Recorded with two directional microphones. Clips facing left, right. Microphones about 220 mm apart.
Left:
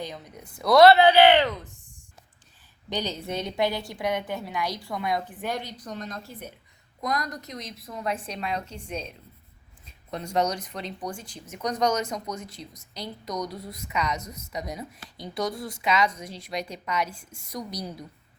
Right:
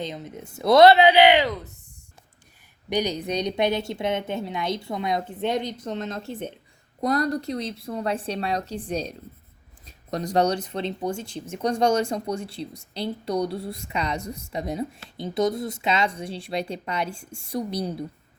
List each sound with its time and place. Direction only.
0.0 s a woman's voice: 20° right (ahead or behind)
2.9 s a woman's voice: 15° right (ahead or behind)